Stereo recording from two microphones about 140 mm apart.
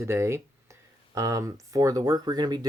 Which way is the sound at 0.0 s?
20° right (ahead or behind).